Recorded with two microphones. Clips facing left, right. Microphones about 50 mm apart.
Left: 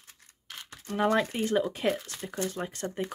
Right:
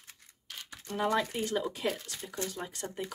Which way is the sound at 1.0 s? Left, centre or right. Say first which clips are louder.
Left 4 dB; left.